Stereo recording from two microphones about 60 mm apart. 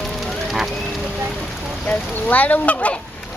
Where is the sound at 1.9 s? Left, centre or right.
Left.